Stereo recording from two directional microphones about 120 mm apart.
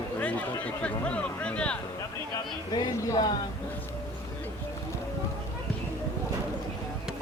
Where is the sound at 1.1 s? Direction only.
10° left (ahead or behind).